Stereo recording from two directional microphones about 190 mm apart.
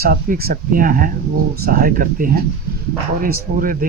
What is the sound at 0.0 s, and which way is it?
Speech, 50° right (ahead or behind).